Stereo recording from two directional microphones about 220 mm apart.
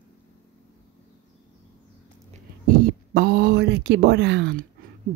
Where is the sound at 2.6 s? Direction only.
40° right (ahead or behind).